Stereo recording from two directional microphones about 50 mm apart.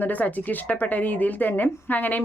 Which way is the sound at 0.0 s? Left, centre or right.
Left.